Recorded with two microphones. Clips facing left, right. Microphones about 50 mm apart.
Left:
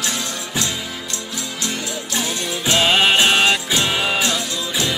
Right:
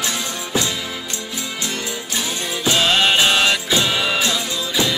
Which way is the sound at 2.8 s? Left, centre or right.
Centre.